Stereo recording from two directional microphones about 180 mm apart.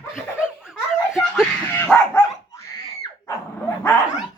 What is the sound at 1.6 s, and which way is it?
Dog, 10° left (ahead or behind).